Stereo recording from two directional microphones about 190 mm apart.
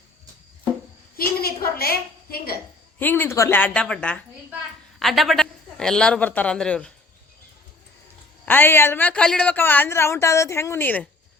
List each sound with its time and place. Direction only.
1.1 s a sound: 50° left (ahead or behind)
3.0 s a woman's voice: 10° left (ahead or behind)
8.4 s a woman's voice: 10° left (ahead or behind)